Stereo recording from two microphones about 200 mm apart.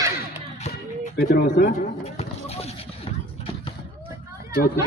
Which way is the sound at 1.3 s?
55° left (ahead or behind).